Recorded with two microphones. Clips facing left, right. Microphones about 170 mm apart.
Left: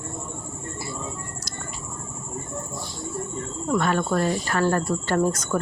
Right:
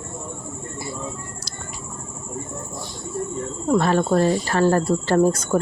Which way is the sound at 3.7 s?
35° right (ahead or behind).